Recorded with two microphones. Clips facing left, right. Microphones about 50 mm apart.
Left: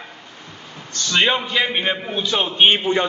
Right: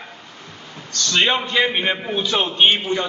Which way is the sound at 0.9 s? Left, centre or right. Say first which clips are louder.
Right 1 dB; left.